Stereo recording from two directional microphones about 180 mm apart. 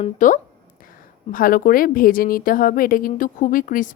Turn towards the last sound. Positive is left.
turn(degrees=50)  # may be behind; listen again after turning